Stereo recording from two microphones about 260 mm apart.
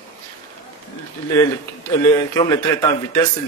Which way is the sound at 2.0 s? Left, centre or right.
Centre.